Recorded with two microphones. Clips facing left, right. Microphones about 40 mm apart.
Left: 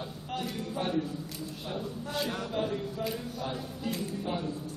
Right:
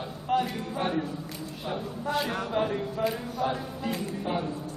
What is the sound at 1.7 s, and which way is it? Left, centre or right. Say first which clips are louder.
A woman's voice: right 6 dB; centre.